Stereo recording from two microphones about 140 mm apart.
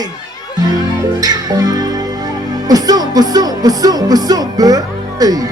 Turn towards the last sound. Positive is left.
turn(degrees=-25)  # may be behind; listen again after turning